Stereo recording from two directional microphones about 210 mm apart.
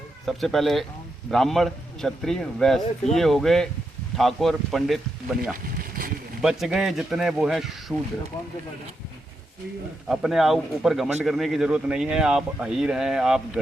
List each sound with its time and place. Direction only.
0.3 s speech: centre (ahead or behind)
5.7 s a sound: 40° right (ahead or behind)
6.4 s speech: 5° right (ahead or behind)
10.1 s speech: centre (ahead or behind)